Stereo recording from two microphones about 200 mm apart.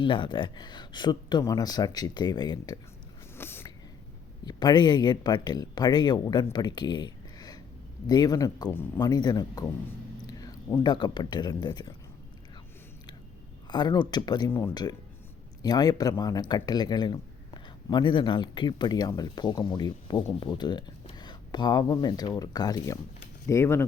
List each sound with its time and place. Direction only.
0.0 s speech: 25° left (ahead or behind)
3.3 s a sound: 10° left (ahead or behind)
4.4 s speech: 20° left (ahead or behind)
13.7 s speech: 20° left (ahead or behind)